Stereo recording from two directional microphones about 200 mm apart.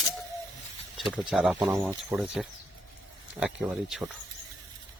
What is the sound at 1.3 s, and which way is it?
Speech, centre (ahead or behind).